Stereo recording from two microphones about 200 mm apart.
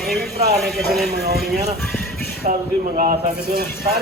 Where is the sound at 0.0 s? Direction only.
Centre (ahead or behind).